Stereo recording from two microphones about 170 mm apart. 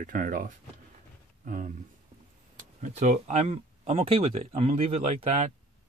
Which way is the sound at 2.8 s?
45° right (ahead or behind).